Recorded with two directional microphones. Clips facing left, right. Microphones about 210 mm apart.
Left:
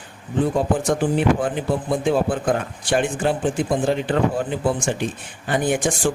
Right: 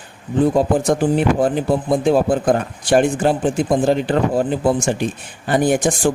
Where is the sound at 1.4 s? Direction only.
40° right (ahead or behind).